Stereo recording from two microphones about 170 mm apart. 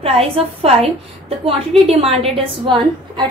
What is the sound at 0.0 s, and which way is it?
A woman's voice, 35° right (ahead or behind).